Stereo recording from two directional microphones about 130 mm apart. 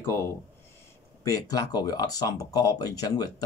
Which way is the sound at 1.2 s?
25° left (ahead or behind).